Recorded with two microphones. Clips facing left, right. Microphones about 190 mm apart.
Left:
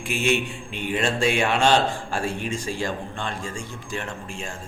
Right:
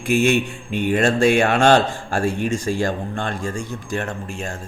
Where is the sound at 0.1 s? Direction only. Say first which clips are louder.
Right 6 dB; 45° right (ahead or behind).